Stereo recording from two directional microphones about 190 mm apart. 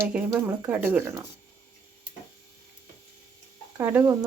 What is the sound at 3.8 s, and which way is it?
Speech, 10° right (ahead or behind).